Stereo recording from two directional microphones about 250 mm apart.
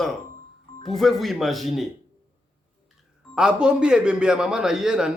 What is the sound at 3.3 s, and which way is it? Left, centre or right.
A man's voice, centre.